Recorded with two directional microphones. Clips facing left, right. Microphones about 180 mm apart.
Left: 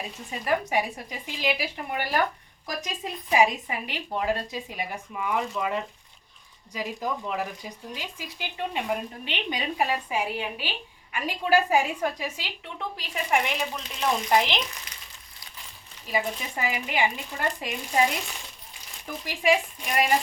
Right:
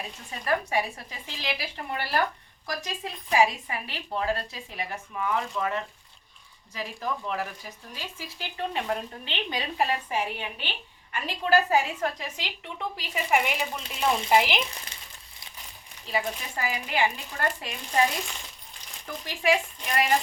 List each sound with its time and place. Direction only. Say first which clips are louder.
0.3 s a woman's voice: left 1 dB; 15° left (ahead or behind); by 14.6 s 5° right (ahead or behind)
14.9 s crumpling: even; 30° right (ahead or behind)
16.0 s speech: left 1 dB; 15° left (ahead or behind)
19.2 s speech: left 1 dB; 10° left (ahead or behind)